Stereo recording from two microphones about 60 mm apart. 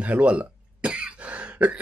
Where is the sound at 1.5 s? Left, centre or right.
Right.